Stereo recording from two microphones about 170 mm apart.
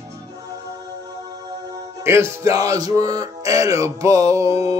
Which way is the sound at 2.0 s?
15° right (ahead or behind).